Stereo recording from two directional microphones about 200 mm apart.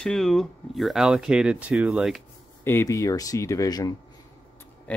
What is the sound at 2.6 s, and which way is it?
Speech, 15° left (ahead or behind).